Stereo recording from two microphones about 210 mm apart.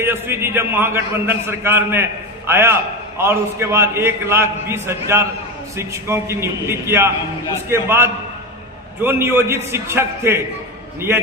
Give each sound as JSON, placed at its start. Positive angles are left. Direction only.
{"t": 0.0, "sound": "a man's voice", "side_deg": -10}